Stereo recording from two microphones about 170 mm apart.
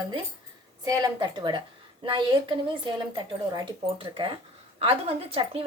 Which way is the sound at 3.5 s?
30° right (ahead or behind).